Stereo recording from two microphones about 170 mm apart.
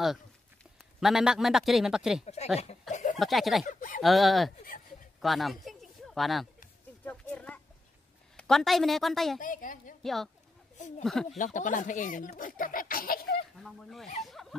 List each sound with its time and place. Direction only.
1.0 s a man's voice: 5° right (ahead or behind)
2.2 s speech: 40° left (ahead or behind)
2.9 s a sound: 45° left (ahead or behind)
3.2 s a man's voice: centre (ahead or behind)
3.6 s speech: 50° left (ahead or behind)
4.0 s a man's voice: centre (ahead or behind)
5.2 s a sound: centre (ahead or behind)
8.4 s a man's voice: centre (ahead or behind)
9.4 s speech: 50° left (ahead or behind)
10.0 s a man's voice: centre (ahead or behind)
11.2 s speech: 50° left (ahead or behind)
13.6 s a man's voice: centre (ahead or behind)
14.3 s a sound: centre (ahead or behind)